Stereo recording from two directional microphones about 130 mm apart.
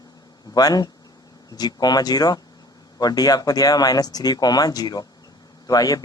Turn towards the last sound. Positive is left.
turn(degrees=30)  # may be behind; listen again after turning